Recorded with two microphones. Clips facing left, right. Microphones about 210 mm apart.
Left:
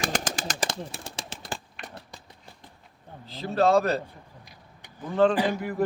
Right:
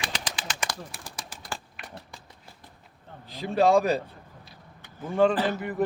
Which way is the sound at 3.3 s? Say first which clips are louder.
Right 1 dB; 15° right (ahead or behind).